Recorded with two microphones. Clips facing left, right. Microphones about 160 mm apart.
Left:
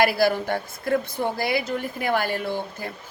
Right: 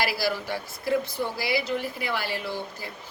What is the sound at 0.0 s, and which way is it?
A woman's voice, 50° left (ahead or behind).